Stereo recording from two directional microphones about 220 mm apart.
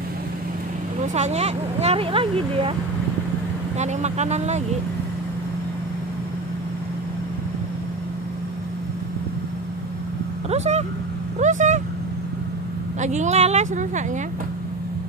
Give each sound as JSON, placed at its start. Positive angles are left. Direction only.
{"t": 1.0, "sound": "speech", "side_deg": -30}
{"t": 3.7, "sound": "speech", "side_deg": -30}
{"t": 10.5, "sound": "speech", "side_deg": -30}
{"t": 13.0, "sound": "speech", "side_deg": -30}